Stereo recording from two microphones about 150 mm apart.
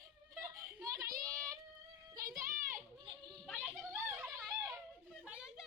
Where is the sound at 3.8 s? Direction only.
10° right (ahead or behind).